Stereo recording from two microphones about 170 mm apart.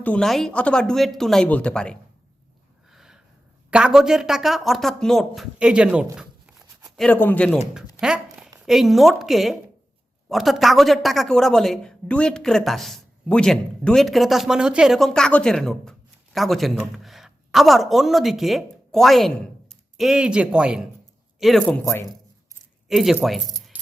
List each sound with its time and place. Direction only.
0.0 s speech: 5° left (ahead or behind)
2.9 s a sound: centre (ahead or behind)
3.7 s speech: 5° right (ahead or behind)
6.9 s speech: 5° left (ahead or behind)
8.0 s speech: 5° right (ahead or behind)
21.8 s speech: 15° left (ahead or behind)
22.9 s speech: centre (ahead or behind)
23.7 s music: 10° right (ahead or behind)